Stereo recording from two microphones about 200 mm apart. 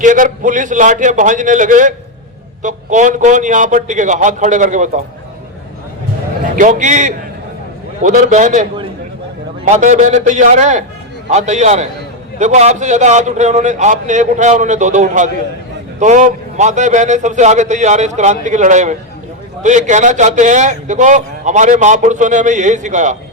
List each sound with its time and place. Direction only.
0.0 s a man's voice: 40° right (ahead or behind)
6.6 s a man's voice: 40° right (ahead or behind)